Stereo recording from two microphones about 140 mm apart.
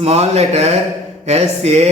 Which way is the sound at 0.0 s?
50° right (ahead or behind).